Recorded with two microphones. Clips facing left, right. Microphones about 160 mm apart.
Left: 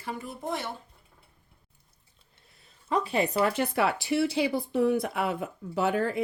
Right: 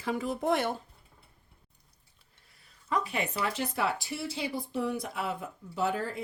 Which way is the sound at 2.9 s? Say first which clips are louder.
Left 5 dB; 30° left (ahead or behind).